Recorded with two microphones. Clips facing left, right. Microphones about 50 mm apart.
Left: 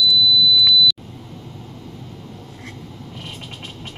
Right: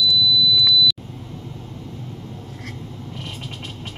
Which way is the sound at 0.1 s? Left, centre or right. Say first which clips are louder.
Left 2 dB; centre.